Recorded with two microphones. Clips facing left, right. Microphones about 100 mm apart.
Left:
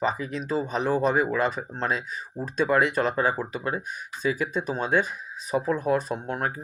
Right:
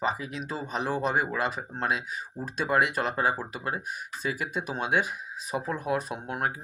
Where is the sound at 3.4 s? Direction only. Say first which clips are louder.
Left 4 dB; 50° left (ahead or behind).